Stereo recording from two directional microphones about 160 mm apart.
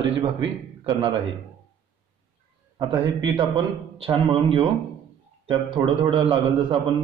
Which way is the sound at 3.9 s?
35° right (ahead or behind).